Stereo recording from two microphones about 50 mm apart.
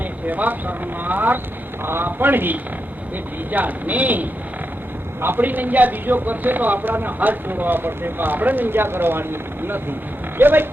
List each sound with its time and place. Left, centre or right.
0.3 s a man's voice: right